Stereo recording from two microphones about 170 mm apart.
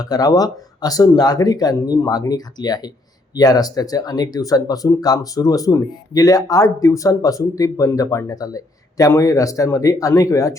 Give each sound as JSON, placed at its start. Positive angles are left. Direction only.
{"t": 0.0, "sound": "speech", "side_deg": 20}